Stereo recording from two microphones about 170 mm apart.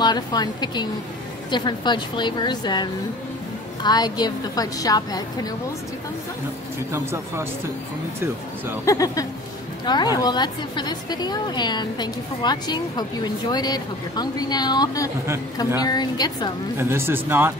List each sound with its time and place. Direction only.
0.0 s a woman's voice: 25° left (ahead or behind)
6.9 s speech: 15° right (ahead or behind)
8.8 s a woman's voice: 20° left (ahead or behind)
16.7 s speech: 15° right (ahead or behind)